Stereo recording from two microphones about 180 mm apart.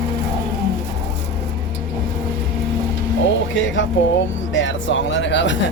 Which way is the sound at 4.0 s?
90° left.